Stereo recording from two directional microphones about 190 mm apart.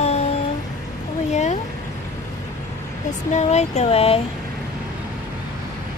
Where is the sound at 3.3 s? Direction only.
35° left (ahead or behind).